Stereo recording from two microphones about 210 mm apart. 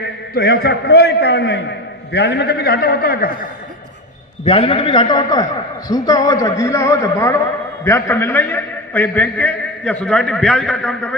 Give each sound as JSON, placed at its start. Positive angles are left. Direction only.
{"t": 0.0, "sound": "a man's voice", "side_deg": 50}
{"t": 4.4, "sound": "a man's voice", "side_deg": 30}